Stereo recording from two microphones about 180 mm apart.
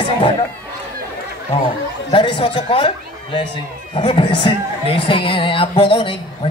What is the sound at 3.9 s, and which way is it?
Speech, 25° left (ahead or behind).